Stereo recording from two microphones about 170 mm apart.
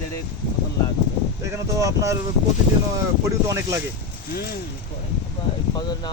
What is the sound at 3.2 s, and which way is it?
Speech, 15° right (ahead or behind).